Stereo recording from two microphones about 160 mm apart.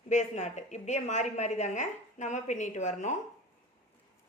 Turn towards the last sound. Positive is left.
turn(degrees=50)  # may be behind; listen again after turning